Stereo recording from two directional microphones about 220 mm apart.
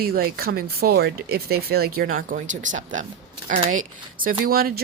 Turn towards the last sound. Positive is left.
turn(degrees=-40)  # may be behind; listen again after turning